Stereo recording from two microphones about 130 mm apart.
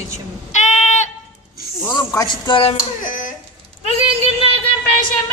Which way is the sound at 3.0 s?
90° left.